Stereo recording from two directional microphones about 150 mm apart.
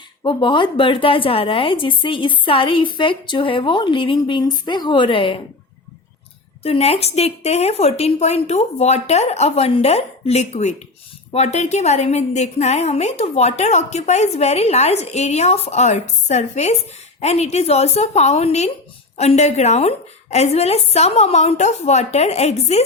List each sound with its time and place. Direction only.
0.2 s a woman's voice: 30° left (ahead or behind)
6.6 s a woman's voice: 40° left (ahead or behind)